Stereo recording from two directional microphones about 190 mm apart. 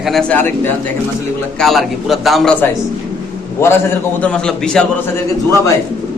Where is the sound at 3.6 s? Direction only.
15° left (ahead or behind).